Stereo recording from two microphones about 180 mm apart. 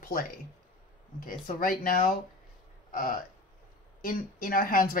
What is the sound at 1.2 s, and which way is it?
Speech, 50° left (ahead or behind).